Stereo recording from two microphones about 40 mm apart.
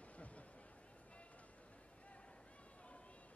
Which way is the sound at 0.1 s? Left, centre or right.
Left.